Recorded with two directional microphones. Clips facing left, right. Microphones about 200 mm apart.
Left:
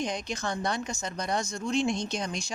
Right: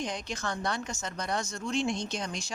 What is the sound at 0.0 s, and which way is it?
A woman's voice, 15° left (ahead or behind).